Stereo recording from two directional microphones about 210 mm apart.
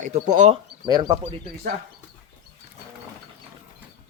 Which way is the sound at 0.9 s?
20° right (ahead or behind).